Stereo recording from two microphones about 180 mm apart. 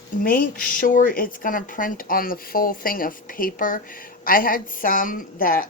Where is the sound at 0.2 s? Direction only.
50° left (ahead or behind).